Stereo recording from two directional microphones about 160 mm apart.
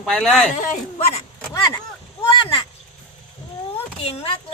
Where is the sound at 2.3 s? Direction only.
30° left (ahead or behind).